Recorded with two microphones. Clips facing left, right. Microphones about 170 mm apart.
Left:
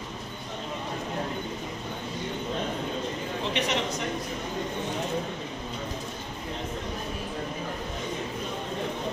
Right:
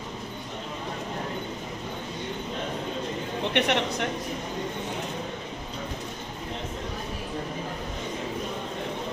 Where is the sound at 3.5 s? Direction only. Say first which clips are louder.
Right 4 dB; 65° right (ahead or behind).